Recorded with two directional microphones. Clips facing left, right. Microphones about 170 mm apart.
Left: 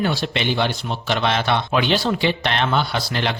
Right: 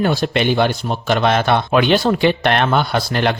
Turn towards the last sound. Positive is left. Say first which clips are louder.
# right 6 dB
turn(degrees=-50)  # may be behind; listen again after turning